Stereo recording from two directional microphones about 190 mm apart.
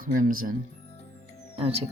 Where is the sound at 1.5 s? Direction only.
30° right (ahead or behind).